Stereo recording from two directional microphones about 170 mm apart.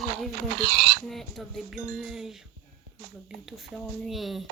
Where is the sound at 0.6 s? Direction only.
60° right (ahead or behind).